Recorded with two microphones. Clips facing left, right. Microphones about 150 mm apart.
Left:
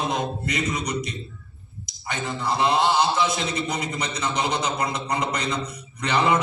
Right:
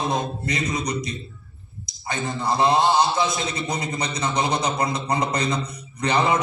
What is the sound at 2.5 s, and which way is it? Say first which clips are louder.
A man's voice: right 2 dB; 30° right (ahead or behind).